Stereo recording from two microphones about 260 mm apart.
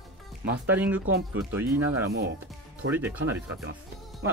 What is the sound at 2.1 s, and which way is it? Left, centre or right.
Speech, right.